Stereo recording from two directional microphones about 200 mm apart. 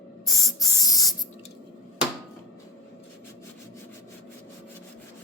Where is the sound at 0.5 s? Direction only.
15° left (ahead or behind).